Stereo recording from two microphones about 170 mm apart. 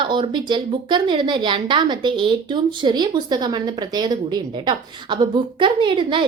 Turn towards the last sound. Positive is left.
turn(degrees=-30)  # may be behind; listen again after turning